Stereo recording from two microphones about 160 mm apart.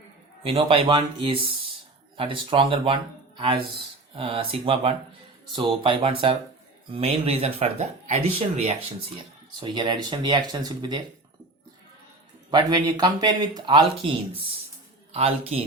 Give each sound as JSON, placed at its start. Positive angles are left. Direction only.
{"t": 0.4, "sound": "speech", "side_deg": -35}
{"t": 12.5, "sound": "speech", "side_deg": -25}